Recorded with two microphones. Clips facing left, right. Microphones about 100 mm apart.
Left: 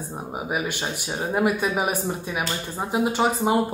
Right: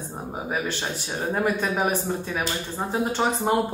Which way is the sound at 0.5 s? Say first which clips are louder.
Left 1 dB; 15° left (ahead or behind).